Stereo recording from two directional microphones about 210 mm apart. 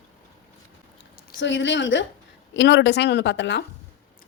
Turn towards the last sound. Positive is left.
turn(degrees=60)  # may be behind; listen again after turning